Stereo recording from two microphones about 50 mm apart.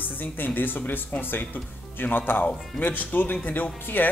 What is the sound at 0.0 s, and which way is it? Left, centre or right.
Speech, left.